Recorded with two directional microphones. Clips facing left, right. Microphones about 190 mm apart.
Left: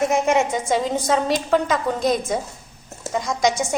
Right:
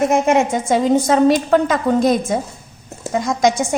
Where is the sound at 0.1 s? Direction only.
50° right (ahead or behind).